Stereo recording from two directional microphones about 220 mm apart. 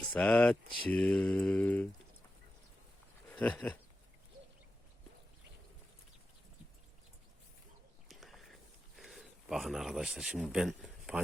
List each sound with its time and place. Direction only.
0.1 s mantra: 5° left (ahead or behind)
3.3 s mantra: 5° left (ahead or behind)
8.0 s a sound: centre (ahead or behind)
9.0 s speech: centre (ahead or behind)